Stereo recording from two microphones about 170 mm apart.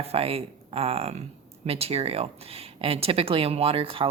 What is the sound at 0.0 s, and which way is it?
Speech, 35° right (ahead or behind).